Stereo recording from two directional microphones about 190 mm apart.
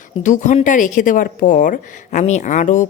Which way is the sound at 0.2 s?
40° left (ahead or behind).